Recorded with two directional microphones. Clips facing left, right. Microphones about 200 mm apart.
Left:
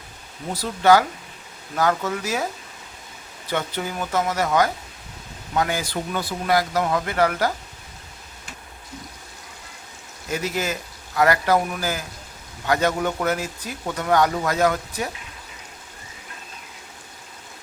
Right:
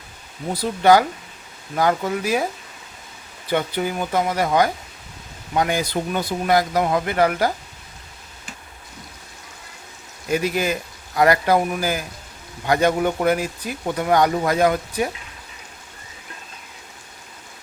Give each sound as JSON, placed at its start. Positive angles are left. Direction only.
{"t": 0.6, "sound": "speech", "side_deg": -15}
{"t": 3.5, "sound": "speech", "side_deg": -15}
{"t": 5.5, "sound": "speech", "side_deg": -20}
{"t": 10.3, "sound": "speech", "side_deg": -15}